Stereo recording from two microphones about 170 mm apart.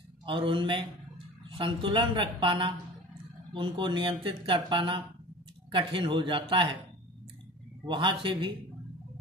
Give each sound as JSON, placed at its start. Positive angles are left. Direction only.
{"t": 0.2, "sound": "speech", "side_deg": -30}
{"t": 7.8, "sound": "speech", "side_deg": -30}